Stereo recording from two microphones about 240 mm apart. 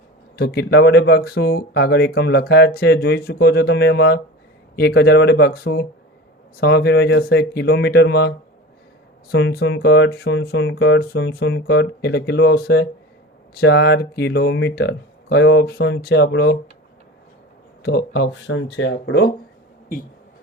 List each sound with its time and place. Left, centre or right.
0.3 s speech: left
9.3 s speech: left
17.8 s speech: left